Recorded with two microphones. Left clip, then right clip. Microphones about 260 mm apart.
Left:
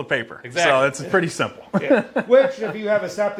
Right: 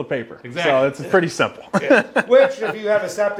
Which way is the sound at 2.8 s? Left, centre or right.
Right.